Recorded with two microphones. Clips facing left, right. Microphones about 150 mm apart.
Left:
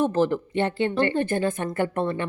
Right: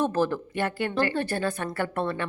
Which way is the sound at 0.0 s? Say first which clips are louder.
Left 3 dB; 15° left (ahead or behind).